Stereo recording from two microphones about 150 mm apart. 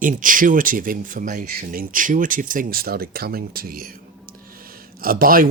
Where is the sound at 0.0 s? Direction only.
65° right (ahead or behind).